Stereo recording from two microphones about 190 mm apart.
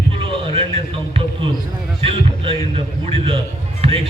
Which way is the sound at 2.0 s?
30° right (ahead or behind).